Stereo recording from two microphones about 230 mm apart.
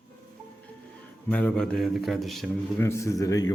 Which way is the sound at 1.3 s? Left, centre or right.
Centre.